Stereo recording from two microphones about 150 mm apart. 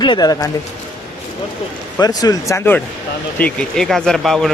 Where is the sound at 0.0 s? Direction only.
30° left (ahead or behind).